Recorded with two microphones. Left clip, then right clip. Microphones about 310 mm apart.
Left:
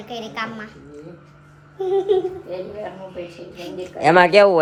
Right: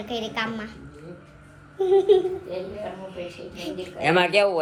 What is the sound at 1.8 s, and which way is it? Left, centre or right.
Speech, centre.